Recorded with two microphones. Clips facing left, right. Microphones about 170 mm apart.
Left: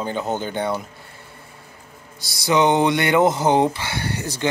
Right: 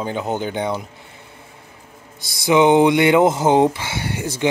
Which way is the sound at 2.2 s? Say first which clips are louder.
Right 3 dB; 20° right (ahead or behind).